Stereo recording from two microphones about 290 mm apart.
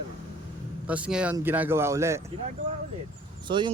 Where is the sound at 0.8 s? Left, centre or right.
Centre.